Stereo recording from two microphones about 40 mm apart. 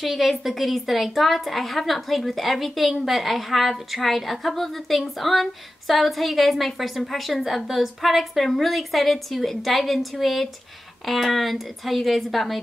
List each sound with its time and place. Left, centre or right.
0.0 s a woman's voice: centre